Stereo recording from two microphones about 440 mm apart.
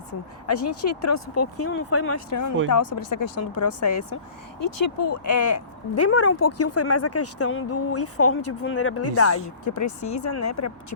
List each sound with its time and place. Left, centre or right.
0.7 s speech: left